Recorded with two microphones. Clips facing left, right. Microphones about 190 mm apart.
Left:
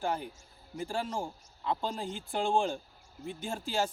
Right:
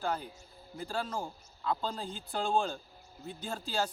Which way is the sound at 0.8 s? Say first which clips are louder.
Left 2 dB; 15° left (ahead or behind).